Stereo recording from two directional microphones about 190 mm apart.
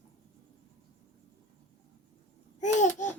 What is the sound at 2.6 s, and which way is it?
Babbling, 40° left (ahead or behind).